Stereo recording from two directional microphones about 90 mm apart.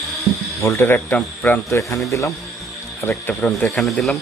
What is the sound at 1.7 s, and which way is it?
Speech, 35° left (ahead or behind).